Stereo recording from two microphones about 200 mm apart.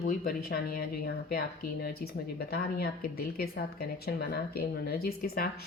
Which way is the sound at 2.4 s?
50° left (ahead or behind).